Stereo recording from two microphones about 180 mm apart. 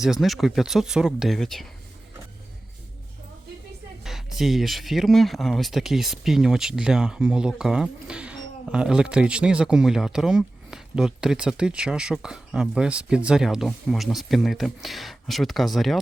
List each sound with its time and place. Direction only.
0.0 s speech: centre (ahead or behind)
4.0 s speech: centre (ahead or behind)